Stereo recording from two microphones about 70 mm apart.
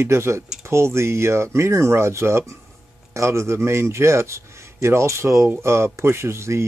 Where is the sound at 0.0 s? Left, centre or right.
Right.